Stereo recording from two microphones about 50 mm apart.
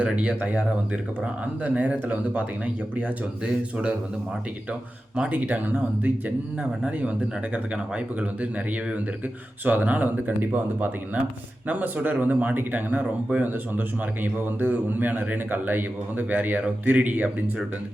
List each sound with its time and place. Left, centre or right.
0.0 s speech: right
1.6 s a man's voice: right
3.4 s speech: right
5.3 s a man's voice: right